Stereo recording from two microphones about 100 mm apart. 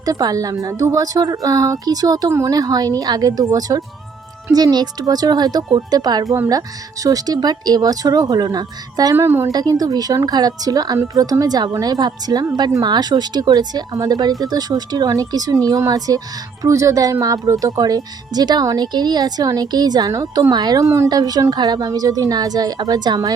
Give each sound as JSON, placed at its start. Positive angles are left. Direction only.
{"t": 0.0, "sound": "speech", "side_deg": -40}
{"t": 9.1, "sound": "a woman's voice", "side_deg": -25}
{"t": 9.5, "sound": "speech", "side_deg": -40}
{"t": 21.1, "sound": "speech", "side_deg": -40}